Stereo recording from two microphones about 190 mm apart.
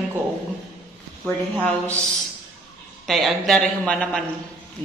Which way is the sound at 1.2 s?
10° left (ahead or behind).